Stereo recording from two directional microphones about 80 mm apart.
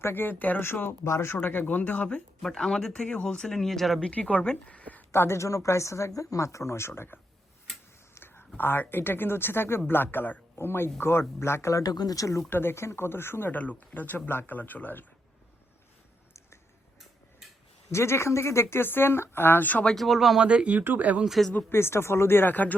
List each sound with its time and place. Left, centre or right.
0.0 s speech: left
1.4 s speech: left; by 4.1 s centre
4.1 s speech: centre
5.1 s speech: left
8.1 s a sound: left
8.5 s speech: left
11.8 s speech: left
12.5 s speech: left
17.9 s speech: left
19.8 s speech: centre
20.4 s speech: centre
21.2 s speech: centre
21.5 s speech: left